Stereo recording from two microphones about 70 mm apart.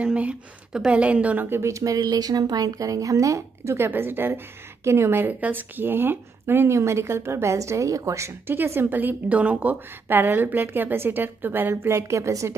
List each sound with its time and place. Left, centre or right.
0.0 s a woman's voice: centre
1.5 s speech: right
3.7 s a woman's voice: right
7.5 s a woman's voice: right
8.5 s a woman's voice: right
11.8 s a woman's voice: right